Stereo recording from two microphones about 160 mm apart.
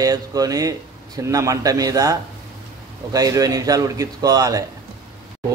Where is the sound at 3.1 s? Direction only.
20° right (ahead or behind).